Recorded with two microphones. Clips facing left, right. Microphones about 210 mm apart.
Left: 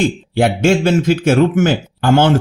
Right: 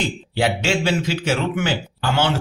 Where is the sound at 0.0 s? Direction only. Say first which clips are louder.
Left 7 dB; 50° left (ahead or behind).